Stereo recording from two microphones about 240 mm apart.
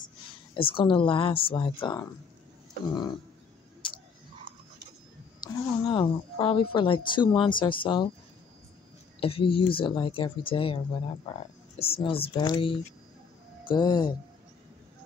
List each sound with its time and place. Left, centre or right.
0.6 s speech: left
5.4 s speech: centre
9.2 s speech: left
11.8 s speech: left